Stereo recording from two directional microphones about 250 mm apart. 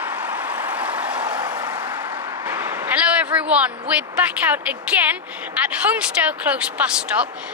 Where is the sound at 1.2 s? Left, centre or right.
Centre.